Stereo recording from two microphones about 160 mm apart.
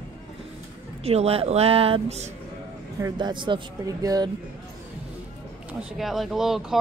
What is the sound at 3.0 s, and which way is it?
Speech, 30° right (ahead or behind).